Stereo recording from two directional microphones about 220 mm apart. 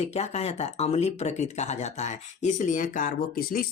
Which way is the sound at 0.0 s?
30° left (ahead or behind).